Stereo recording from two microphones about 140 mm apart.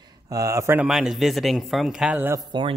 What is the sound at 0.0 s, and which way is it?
Speech, 25° right (ahead or behind).